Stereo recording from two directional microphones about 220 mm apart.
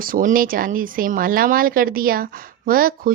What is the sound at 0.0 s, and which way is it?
Speech, 40° right (ahead or behind).